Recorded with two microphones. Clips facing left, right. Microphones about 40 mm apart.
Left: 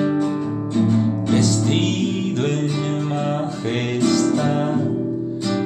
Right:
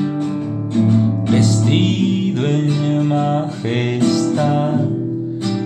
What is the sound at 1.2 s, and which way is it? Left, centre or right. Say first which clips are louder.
Music: right 2 dB; centre.